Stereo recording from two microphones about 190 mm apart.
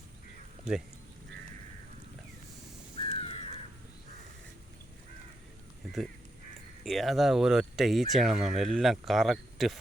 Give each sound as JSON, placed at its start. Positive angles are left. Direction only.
{"t": 0.7, "sound": "speech", "side_deg": -5}
{"t": 3.0, "sound": "crow", "side_deg": 30}
{"t": 5.8, "sound": "duck", "side_deg": 0}
{"t": 6.8, "sound": "speech", "side_deg": 0}